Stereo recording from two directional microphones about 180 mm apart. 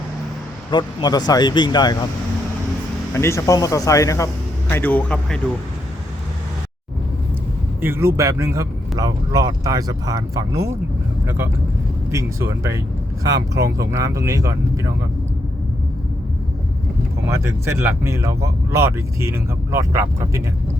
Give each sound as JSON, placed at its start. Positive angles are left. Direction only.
{"t": 0.7, "sound": "speech", "side_deg": 25}
{"t": 3.1, "sound": "speech", "side_deg": 15}
{"t": 7.8, "sound": "speech", "side_deg": -10}
{"t": 13.9, "sound": "speech", "side_deg": -15}
{"t": 17.2, "sound": "speech", "side_deg": -15}